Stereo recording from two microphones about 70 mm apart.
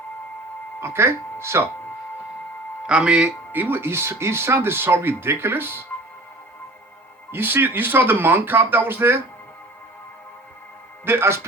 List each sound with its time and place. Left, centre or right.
0.8 s speech: right
2.8 s speech: centre
3.5 s speech: right
7.3 s speech: right
11.0 s speech: right